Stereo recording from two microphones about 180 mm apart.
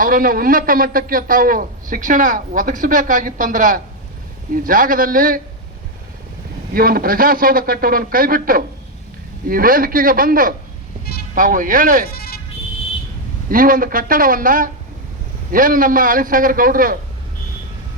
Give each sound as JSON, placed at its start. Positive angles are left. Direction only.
{"t": 0.0, "sound": "a man's voice", "side_deg": -50}
{"t": 6.7, "sound": "a man's voice", "side_deg": -55}
{"t": 12.1, "sound": "music", "side_deg": 60}
{"t": 13.5, "sound": "a man's voice", "side_deg": -50}